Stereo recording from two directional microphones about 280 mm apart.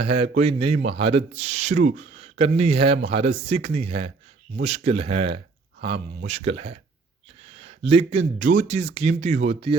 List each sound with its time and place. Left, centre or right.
0.0 s speech: centre
7.9 s speech: right